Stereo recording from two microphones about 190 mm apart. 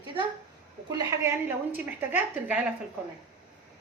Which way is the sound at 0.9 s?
15° right (ahead or behind).